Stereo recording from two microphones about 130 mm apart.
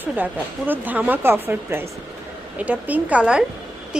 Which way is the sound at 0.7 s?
15° right (ahead or behind).